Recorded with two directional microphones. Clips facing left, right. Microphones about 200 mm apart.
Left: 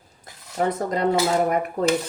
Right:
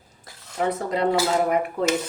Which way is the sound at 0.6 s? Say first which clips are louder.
Left 1 dB; 45° left (ahead or behind).